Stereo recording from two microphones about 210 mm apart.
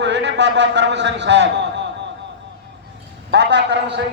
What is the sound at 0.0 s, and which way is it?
A man's voice, 55° right (ahead or behind).